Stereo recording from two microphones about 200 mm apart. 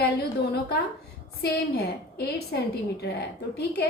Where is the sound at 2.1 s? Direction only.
55° left (ahead or behind).